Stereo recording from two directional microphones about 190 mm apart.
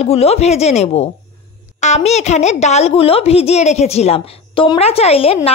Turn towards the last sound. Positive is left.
turn(degrees=30)  # may be behind; listen again after turning